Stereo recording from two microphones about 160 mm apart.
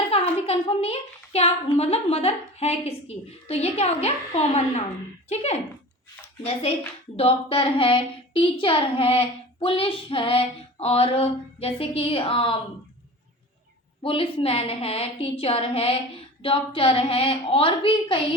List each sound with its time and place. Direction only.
0.1 s a woman's voice: 40° left (ahead or behind)
14.0 s a woman's voice: 35° left (ahead or behind)